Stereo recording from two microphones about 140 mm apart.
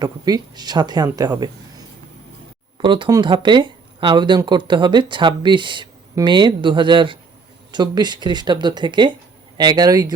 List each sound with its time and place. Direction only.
0.0 s speech: 30° right (ahead or behind)
2.7 s speech: 35° right (ahead or behind)